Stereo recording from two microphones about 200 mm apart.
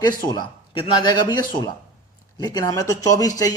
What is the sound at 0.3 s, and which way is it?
Speech, 25° left (ahead or behind).